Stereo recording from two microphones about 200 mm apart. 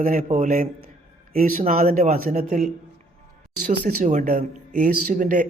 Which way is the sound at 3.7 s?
40° right (ahead or behind).